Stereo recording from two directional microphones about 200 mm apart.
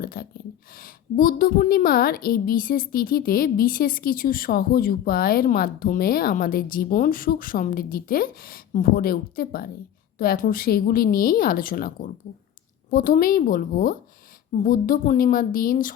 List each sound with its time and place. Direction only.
0.0 s a woman's voice: 45° left (ahead or behind)